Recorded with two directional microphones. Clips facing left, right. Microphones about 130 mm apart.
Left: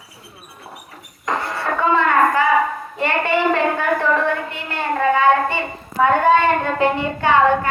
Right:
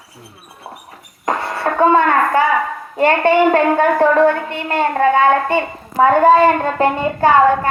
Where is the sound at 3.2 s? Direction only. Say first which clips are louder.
Right 4 dB; 45° right (ahead or behind).